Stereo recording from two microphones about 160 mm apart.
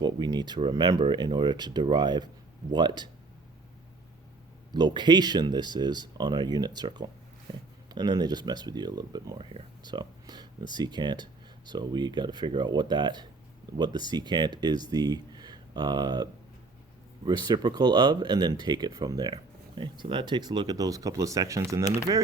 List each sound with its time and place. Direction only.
0.0 s speech: 25° right (ahead or behind)
4.7 s speech: 25° right (ahead or behind)